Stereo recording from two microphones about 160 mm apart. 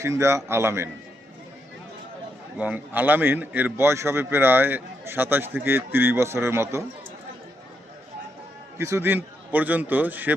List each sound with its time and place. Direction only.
0.0 s a man's voice: 20° right (ahead or behind)
2.6 s a man's voice: 10° right (ahead or behind)
8.8 s a man's voice: 15° right (ahead or behind)